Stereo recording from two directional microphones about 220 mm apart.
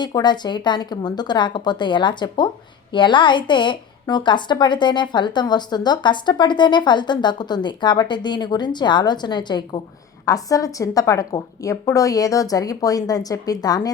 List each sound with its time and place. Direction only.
0.0 s a woman's voice: 20° left (ahead or behind)